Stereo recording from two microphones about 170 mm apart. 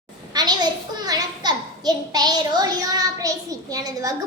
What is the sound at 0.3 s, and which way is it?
A child's voice, 25° right (ahead or behind).